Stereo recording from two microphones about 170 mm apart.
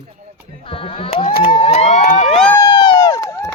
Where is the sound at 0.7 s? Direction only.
30° left (ahead or behind).